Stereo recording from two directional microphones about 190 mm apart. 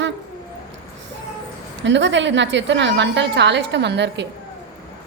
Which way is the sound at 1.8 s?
75° right (ahead or behind).